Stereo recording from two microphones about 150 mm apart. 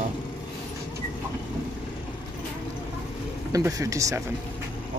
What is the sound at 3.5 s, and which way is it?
Speech, 20° right (ahead or behind).